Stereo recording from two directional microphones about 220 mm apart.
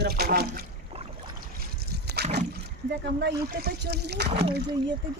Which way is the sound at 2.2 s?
50° right (ahead or behind).